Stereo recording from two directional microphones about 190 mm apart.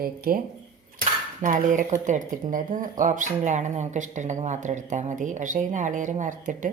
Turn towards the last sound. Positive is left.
turn(degrees=-40)  # may be behind; listen again after turning